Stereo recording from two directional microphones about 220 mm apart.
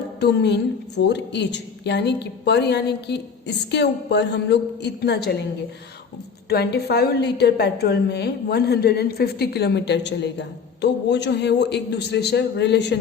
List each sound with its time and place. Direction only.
0.2 s a woman's voice: 50° left (ahead or behind)
6.5 s a woman's voice: 45° left (ahead or behind)